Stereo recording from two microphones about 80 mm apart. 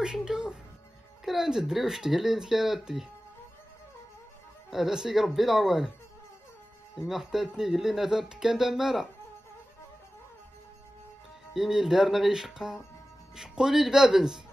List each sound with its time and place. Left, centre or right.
0.0 s music: centre
1.2 s speech: centre
4.6 s speech: centre
7.0 s speech: centre
11.5 s speech: centre